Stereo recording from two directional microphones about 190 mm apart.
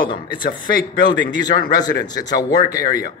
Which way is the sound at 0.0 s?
25° left (ahead or behind).